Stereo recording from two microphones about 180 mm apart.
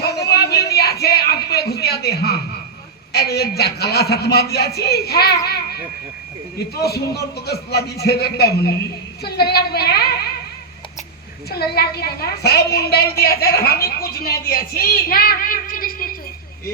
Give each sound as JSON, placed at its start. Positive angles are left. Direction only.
{"t": 0.0, "sound": "a sound", "side_deg": 65}
{"t": 3.1, "sound": "a woman's voice", "side_deg": 65}
{"t": 6.7, "sound": "a woman's voice", "side_deg": 65}
{"t": 11.4, "sound": "a woman's voice", "side_deg": 60}